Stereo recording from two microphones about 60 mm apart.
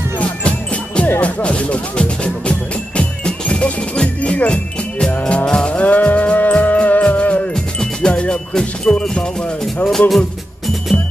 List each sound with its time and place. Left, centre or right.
0.2 s music: centre
1.2 s speech: left
3.0 s music: centre
9.8 s speech: centre